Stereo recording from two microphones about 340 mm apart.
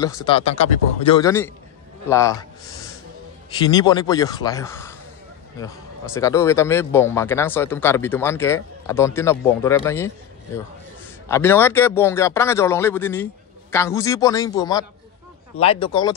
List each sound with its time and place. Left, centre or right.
0.0 s speech: centre
3.5 s speech: centre
6.1 s speech: centre
11.2 s speech: centre